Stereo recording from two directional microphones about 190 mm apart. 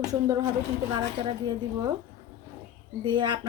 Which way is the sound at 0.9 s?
20° right (ahead or behind).